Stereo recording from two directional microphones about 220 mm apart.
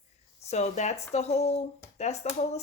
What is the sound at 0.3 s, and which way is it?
Speech, 30° left (ahead or behind).